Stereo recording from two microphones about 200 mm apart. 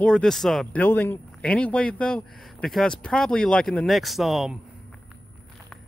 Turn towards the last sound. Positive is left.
turn(degrees=0)  # may be behind; listen again after turning